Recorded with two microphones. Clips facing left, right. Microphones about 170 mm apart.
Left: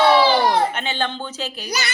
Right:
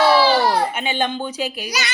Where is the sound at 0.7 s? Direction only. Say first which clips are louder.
Right 2 dB; 10° right (ahead or behind).